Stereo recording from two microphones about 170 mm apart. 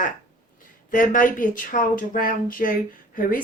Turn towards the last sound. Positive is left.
turn(degrees=55)  # may be behind; listen again after turning